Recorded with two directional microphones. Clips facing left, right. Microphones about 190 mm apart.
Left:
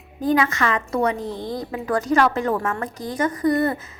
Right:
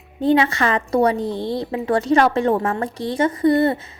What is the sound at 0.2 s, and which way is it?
A woman's voice, 30° right (ahead or behind).